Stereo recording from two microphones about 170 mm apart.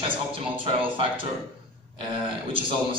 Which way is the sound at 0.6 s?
30° right (ahead or behind).